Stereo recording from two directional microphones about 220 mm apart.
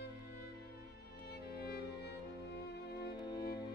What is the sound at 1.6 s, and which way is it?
Music, 50° left (ahead or behind).